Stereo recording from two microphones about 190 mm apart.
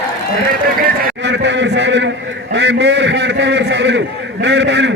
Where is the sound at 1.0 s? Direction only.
60° right (ahead or behind).